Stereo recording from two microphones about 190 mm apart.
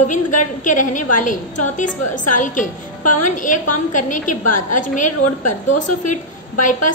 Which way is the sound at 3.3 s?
40° left (ahead or behind).